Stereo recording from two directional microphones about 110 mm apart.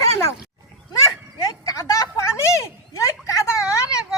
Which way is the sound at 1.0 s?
30° left (ahead or behind).